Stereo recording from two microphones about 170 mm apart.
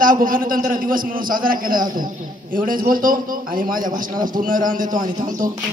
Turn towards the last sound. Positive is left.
turn(degrees=-50)  # may be behind; listen again after turning